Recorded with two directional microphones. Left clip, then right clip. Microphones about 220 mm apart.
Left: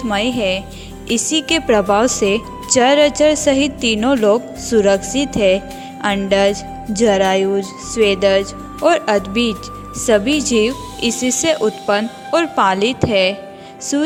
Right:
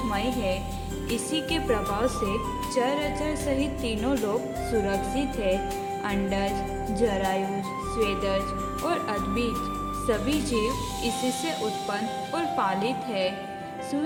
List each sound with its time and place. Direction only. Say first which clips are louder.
0.1 s a woman's voice: left 13 dB; 40° left (ahead or behind)